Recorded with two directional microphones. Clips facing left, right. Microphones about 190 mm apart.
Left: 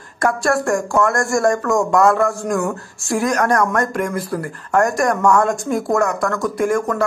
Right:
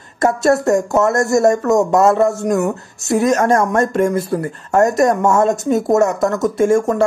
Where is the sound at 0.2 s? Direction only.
25° right (ahead or behind).